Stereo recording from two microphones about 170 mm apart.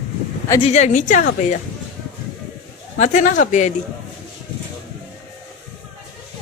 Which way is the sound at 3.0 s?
45° left (ahead or behind).